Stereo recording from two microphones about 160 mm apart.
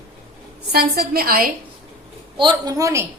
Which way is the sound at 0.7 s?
75° right (ahead or behind).